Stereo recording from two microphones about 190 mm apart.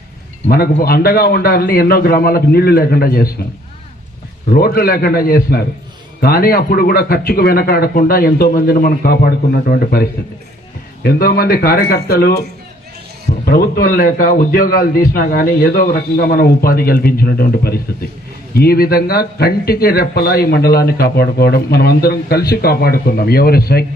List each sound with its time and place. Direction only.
0.4 s a man's voice: 55° left (ahead or behind)
4.5 s a man's voice: 50° left (ahead or behind)
13.4 s a man's voice: 55° left (ahead or behind)